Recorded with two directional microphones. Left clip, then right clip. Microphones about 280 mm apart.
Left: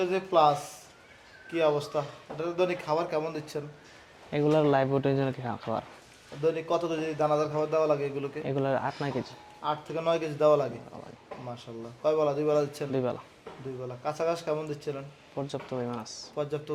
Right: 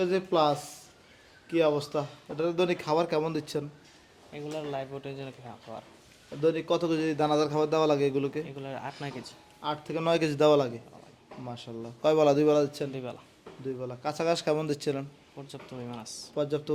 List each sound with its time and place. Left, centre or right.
0.0 s speech: right
4.3 s speech: left
6.4 s a man's voice: right
8.4 s speech: left
9.0 s speech: centre
9.9 s a man's voice: right
11.4 s speech: right
12.0 s a man's voice: right
12.9 s speech: centre
13.8 s speech: right
15.4 s speech: centre
15.8 s speech: centre
16.3 s speech: right